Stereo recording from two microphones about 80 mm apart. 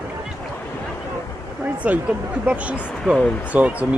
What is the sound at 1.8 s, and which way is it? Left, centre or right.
Speech, centre.